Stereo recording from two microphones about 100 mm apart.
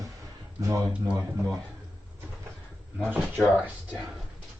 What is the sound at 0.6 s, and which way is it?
Speech, 30° right (ahead or behind).